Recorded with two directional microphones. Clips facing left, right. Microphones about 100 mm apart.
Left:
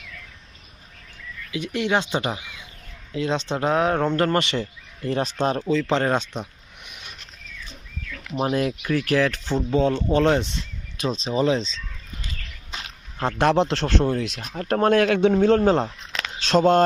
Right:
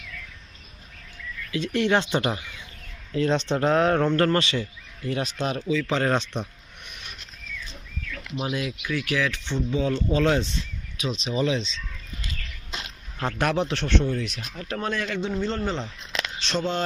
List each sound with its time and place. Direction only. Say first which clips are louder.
1.5 s speech: right 1 dB; 15° left (ahead or behind); by 5.6 s 35° left (ahead or behind)
5.7 s speech: even; 25° left (ahead or behind)
8.4 s speech: left 6 dB; 40° left (ahead or behind)
10.2 s speech: left 3 dB; 25° left (ahead or behind)
11.0 s speech: left 4 dB; 35° left (ahead or behind)
13.1 s speech: left 5 dB; 30° left (ahead or behind)
13.8 s speech: left 3 dB; 50° left (ahead or behind)
14.3 s speech: left 4 dB; 35° left (ahead or behind)
14.6 s speech: left 11 dB; 55° left (ahead or behind)